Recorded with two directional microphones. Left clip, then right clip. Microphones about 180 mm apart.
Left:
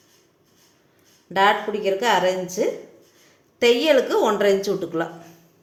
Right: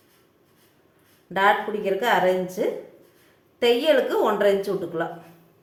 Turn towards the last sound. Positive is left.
turn(degrees=35)  # may be behind; listen again after turning